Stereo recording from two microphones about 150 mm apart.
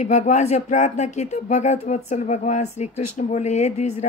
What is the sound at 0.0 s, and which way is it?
A woman's voice, 50° left (ahead or behind).